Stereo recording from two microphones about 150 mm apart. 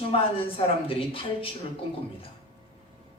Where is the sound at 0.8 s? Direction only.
35° left (ahead or behind).